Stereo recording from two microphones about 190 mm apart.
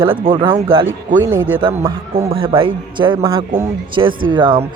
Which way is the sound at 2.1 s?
30° right (ahead or behind).